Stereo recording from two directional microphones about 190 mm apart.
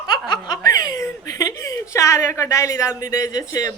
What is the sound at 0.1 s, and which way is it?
Snicker, 20° left (ahead or behind).